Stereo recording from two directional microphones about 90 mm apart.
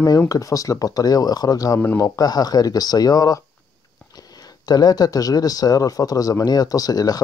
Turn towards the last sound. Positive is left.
turn(degrees=45)  # may be behind; listen again after turning